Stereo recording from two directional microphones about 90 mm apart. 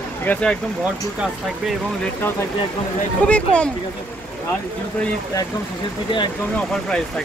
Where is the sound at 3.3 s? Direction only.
15° left (ahead or behind).